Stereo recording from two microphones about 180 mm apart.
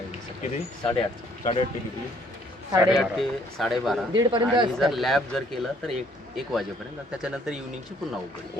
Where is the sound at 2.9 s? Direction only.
Centre (ahead or behind).